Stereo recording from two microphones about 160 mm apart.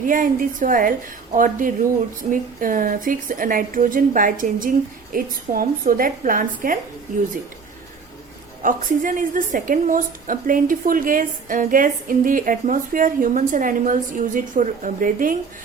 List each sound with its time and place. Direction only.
0.0 s a woman's voice: 55° right (ahead or behind)
8.6 s a woman's voice: 55° right (ahead or behind)